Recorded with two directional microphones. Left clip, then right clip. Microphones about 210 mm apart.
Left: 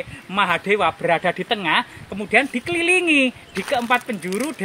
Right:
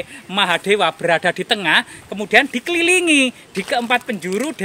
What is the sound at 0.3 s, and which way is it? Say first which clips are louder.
Speech: right 2 dB; 55° right (ahead or behind).